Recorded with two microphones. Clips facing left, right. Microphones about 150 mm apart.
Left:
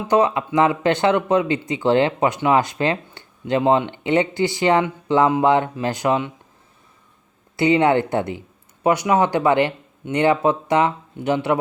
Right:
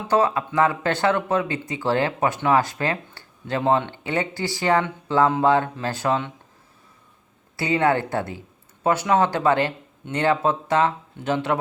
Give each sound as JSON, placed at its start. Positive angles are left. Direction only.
{"t": 0.1, "sound": "speech", "side_deg": 15}
{"t": 7.5, "sound": "speech", "side_deg": 20}